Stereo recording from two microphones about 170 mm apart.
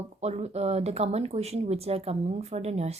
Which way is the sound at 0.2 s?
40° right (ahead or behind).